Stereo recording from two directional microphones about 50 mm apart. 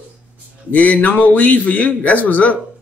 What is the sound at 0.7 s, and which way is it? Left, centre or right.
A man's voice, left.